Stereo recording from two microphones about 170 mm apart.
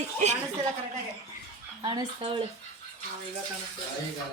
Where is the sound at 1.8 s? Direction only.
30° right (ahead or behind).